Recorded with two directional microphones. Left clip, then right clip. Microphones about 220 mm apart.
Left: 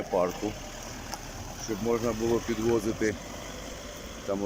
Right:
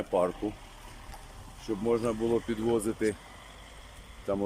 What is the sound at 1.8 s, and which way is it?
Speech, 10° right (ahead or behind).